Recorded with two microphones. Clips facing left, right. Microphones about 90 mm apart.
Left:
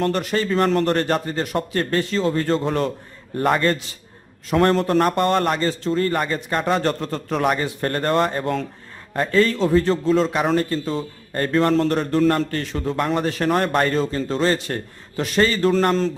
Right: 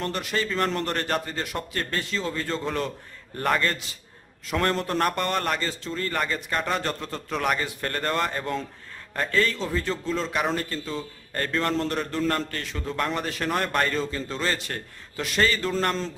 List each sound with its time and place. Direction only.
0.0 s a man's voice: 40° left (ahead or behind)
3.3 s a man's voice: 25° left (ahead or behind)
4.4 s a man's voice: 40° left (ahead or behind)
4.9 s a man's voice: 25° left (ahead or behind)
6.8 s a man's voice: 45° left (ahead or behind)
7.4 s a man's voice: 25° left (ahead or behind)
11.3 s a man's voice: 30° left (ahead or behind)